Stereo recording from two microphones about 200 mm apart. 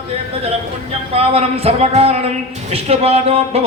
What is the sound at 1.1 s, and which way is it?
A man's voice, 30° right (ahead or behind).